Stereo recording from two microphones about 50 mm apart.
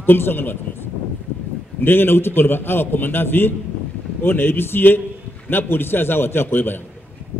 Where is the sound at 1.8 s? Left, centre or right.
Left.